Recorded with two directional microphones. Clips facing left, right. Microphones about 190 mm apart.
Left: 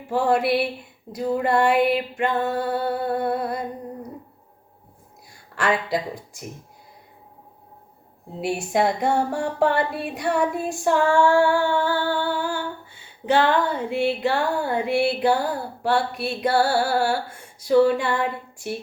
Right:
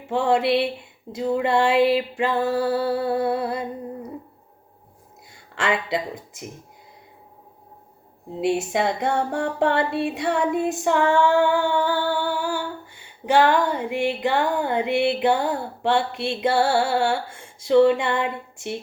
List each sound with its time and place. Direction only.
0.1 s music: 25° right (ahead or behind)
5.3 s speech: 25° right (ahead or behind)
8.4 s music: 20° right (ahead or behind)